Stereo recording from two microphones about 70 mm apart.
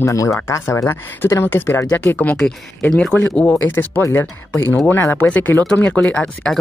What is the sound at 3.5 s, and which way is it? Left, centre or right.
Speech, left.